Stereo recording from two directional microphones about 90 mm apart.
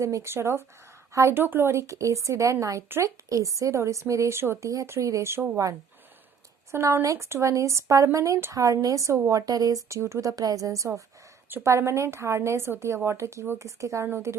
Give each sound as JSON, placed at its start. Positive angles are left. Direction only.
{"t": 0.0, "sound": "speech", "side_deg": -35}